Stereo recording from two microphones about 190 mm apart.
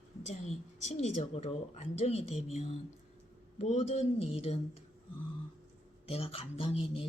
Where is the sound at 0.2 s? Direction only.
35° left (ahead or behind).